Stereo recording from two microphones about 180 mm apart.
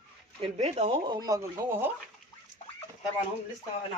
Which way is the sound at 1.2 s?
15° right (ahead or behind).